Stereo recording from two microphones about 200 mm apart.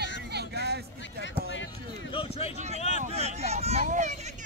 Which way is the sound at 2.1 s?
30° left (ahead or behind).